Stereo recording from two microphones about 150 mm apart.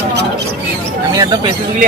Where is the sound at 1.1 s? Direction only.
25° right (ahead or behind).